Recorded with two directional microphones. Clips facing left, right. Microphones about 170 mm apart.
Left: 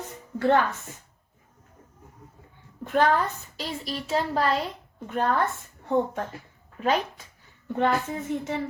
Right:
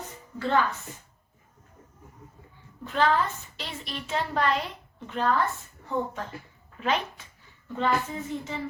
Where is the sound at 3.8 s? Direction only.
35° left (ahead or behind).